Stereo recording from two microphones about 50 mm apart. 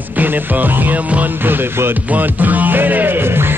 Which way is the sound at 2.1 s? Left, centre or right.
Right.